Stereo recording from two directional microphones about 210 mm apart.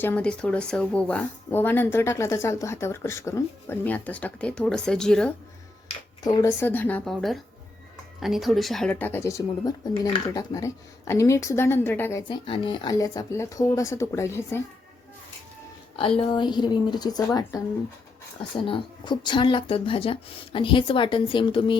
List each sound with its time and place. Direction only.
0.0 s speech: 5° left (ahead or behind)
6.2 s speech: 15° left (ahead or behind)
12.3 s speech: 25° left (ahead or behind)
16.0 s speech: 25° left (ahead or behind)
18.6 s speech: 25° left (ahead or behind)